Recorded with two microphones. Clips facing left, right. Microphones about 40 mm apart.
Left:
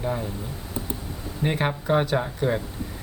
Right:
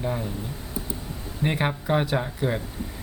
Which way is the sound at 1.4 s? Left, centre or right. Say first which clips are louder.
Left 1 dB; centre.